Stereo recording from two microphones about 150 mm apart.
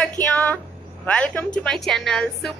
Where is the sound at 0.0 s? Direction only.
10° left (ahead or behind).